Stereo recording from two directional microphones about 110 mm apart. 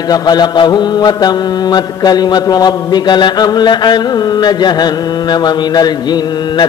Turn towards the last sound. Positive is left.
turn(degrees=40)  # may be behind; listen again after turning